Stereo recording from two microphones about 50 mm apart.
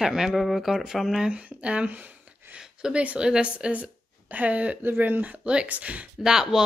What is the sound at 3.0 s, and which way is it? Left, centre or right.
Speech, right.